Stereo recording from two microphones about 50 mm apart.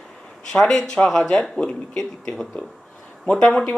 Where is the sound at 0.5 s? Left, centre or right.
Centre.